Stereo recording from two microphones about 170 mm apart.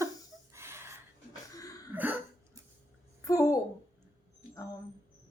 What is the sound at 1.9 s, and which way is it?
Cough, 10° right (ahead or behind).